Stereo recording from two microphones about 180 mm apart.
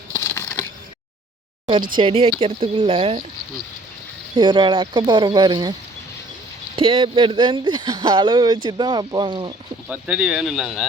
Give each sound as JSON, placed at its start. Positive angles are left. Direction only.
{"t": 0.1, "sound": "a sound", "side_deg": 15}
{"t": 2.0, "sound": "speech", "side_deg": -30}
{"t": 4.4, "sound": "speech", "side_deg": -25}
{"t": 6.7, "sound": "speech", "side_deg": -30}
{"t": 9.9, "sound": "speech", "side_deg": -5}